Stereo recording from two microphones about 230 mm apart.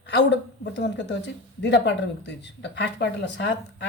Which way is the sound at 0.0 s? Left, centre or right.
Left.